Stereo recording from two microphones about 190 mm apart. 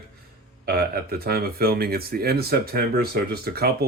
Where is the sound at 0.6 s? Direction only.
55° right (ahead or behind).